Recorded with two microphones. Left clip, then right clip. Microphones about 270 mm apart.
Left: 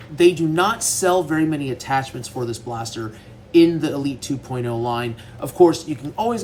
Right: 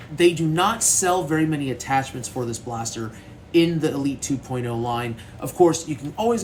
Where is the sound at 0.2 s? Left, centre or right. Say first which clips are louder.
Left 3 dB; centre.